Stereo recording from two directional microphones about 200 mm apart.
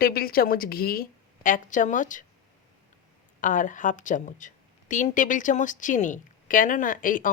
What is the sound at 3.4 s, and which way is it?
A woman's voice, 40° left (ahead or behind).